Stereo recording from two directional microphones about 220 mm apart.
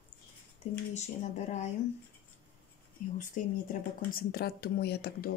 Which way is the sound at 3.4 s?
35° left (ahead or behind).